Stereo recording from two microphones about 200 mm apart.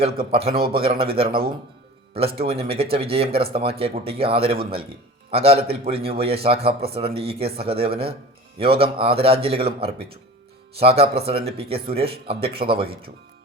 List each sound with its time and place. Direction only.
0.3 s a man's voice: 30° right (ahead or behind)